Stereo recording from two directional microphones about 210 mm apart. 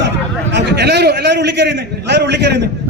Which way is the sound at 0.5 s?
55° right (ahead or behind).